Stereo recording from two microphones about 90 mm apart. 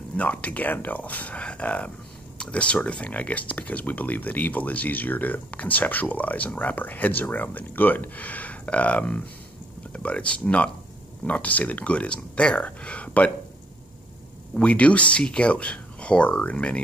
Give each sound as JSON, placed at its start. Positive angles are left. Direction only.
{"t": 0.2, "sound": "speech", "side_deg": 15}
{"t": 14.5, "sound": "speech", "side_deg": 15}